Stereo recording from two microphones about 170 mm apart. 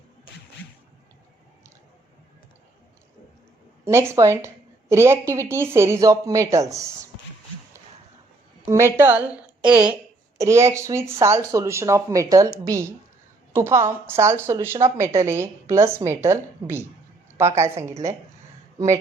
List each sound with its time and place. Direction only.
3.8 s a woman's voice: 15° right (ahead or behind)
8.6 s a woman's voice: 15° right (ahead or behind)